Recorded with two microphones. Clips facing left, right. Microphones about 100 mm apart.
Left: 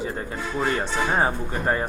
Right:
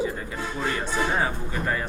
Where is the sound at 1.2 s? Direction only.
35° left (ahead or behind).